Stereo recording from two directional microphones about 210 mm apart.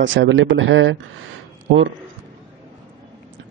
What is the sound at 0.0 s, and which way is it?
Speech, 65° right (ahead or behind).